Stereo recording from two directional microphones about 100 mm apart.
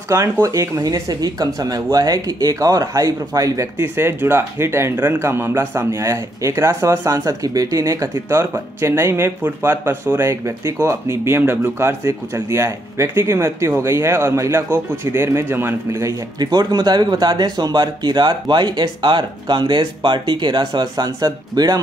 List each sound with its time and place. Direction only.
0.1 s speech: 35° right (ahead or behind)
3.7 s speech: 25° right (ahead or behind); by 21.7 s 40° right (ahead or behind)